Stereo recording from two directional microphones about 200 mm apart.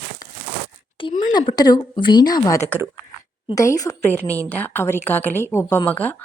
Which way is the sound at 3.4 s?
15° left (ahead or behind).